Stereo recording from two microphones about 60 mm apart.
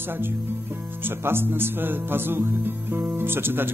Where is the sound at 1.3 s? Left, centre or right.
Right.